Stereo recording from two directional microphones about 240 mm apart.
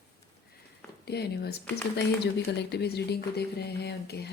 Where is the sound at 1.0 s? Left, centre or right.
Left.